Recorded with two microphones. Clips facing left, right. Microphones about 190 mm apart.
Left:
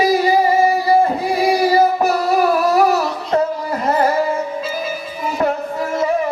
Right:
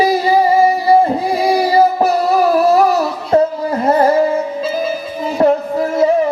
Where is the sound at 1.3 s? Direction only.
30° right (ahead or behind).